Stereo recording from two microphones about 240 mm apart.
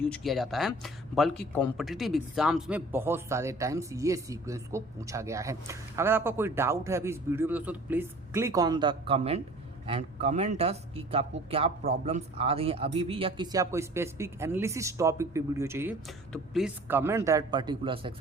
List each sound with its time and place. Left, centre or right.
0.0 s speech: centre; by 18.1 s right